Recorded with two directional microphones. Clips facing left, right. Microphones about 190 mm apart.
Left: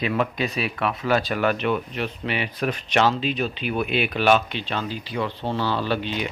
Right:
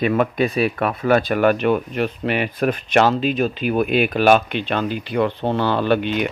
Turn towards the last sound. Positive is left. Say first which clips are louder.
# right 7 dB
turn(degrees=-55)  # may be behind; listen again after turning